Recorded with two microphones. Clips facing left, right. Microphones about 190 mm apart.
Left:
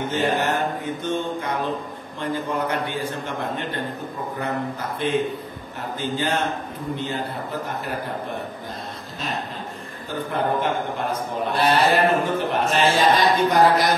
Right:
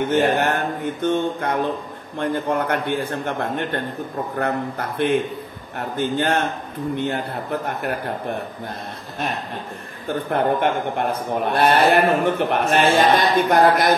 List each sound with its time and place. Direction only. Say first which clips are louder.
0.1 s a man's voice: right 3 dB; 55° right (ahead or behind)
7.6 s a man's voice: right 3 dB; 60° right (ahead or behind)
10.0 s a man's voice: right 4 dB; 60° right (ahead or behind)